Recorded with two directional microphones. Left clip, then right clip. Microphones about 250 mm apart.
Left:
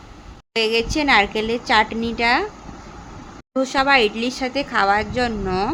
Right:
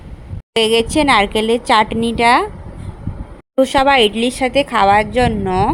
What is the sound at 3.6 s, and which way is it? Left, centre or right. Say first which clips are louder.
Speech: right 5 dB; right.